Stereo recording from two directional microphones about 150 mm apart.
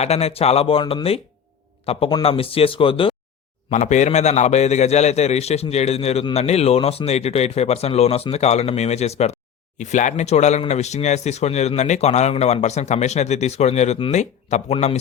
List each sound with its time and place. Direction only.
0.0 s speech: 45° left (ahead or behind)
3.7 s a man's voice: 50° left (ahead or behind)